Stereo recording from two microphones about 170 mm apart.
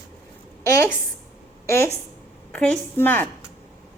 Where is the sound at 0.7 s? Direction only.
15° left (ahead or behind).